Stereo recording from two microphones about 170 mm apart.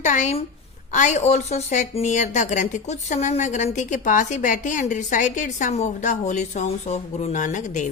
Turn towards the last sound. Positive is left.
turn(degrees=45)  # may be behind; listen again after turning